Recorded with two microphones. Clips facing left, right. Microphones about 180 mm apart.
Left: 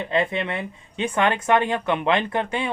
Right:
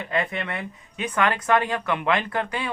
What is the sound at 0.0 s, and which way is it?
Speech, 25° left (ahead or behind).